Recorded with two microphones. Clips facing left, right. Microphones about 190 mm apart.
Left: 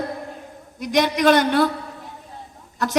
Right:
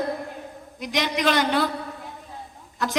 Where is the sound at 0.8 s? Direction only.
45° left (ahead or behind).